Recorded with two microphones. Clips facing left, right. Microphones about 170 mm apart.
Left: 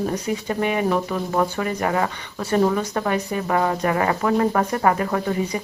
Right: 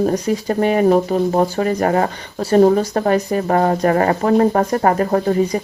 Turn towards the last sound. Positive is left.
turn(degrees=-40)  # may be behind; listen again after turning